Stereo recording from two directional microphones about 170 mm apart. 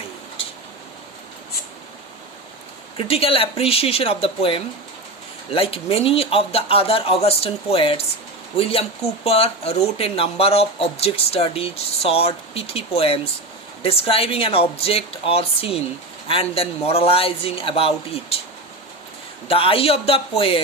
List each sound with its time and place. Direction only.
3.0 s speech: 35° left (ahead or behind)
19.5 s speech: 35° left (ahead or behind)